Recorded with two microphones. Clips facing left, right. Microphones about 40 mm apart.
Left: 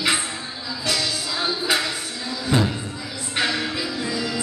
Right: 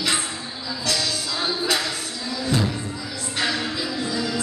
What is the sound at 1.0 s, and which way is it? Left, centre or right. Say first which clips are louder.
Music: left 1 dB; centre.